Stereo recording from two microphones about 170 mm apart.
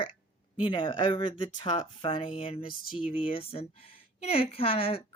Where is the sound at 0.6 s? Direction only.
30° left (ahead or behind).